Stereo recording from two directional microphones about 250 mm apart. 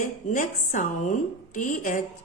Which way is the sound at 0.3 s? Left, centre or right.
Left.